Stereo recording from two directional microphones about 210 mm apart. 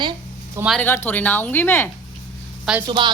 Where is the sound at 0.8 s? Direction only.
10° left (ahead or behind).